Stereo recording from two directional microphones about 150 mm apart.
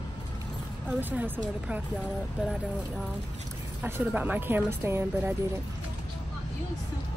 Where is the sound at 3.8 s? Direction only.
15° right (ahead or behind).